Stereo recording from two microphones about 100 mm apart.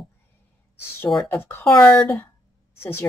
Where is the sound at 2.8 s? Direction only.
25° left (ahead or behind).